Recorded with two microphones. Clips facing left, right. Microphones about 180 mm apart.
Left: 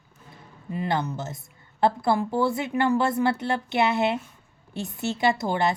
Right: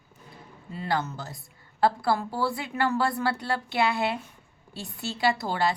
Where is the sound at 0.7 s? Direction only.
20° left (ahead or behind).